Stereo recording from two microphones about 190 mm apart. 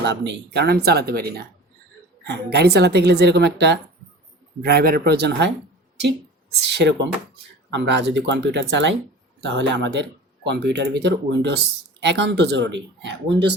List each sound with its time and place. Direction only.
0.0 s speech: 65° right (ahead or behind)
6.6 s speech: 65° right (ahead or behind)